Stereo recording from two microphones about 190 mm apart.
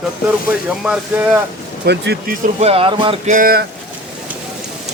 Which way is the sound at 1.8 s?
60° right (ahead or behind).